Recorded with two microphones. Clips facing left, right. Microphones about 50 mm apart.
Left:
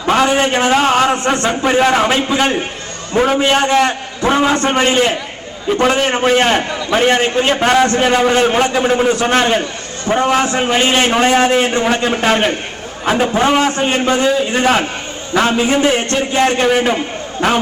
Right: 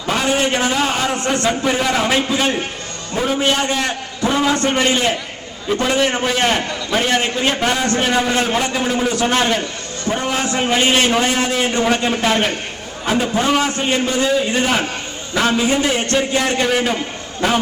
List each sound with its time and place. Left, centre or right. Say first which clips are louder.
0.1 s a man's voice: left 5 dB; left
3.3 s a man's voice: left 4 dB; left